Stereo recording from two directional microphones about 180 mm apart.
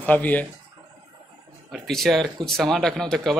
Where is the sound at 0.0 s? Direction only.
10° left (ahead or behind).